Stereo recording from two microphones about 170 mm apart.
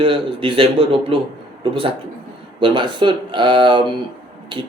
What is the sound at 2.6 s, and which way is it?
Speech, 30° right (ahead or behind).